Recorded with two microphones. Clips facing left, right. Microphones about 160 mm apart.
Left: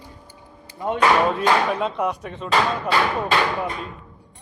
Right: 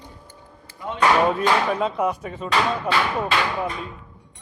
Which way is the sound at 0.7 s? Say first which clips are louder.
Left 9 dB; 15° left (ahead or behind).